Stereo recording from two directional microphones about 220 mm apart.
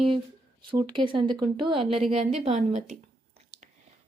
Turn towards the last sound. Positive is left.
turn(degrees=-30)  # may be behind; listen again after turning